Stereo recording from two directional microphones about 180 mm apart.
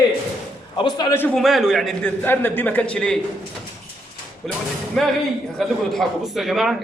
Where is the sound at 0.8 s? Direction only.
25° left (ahead or behind).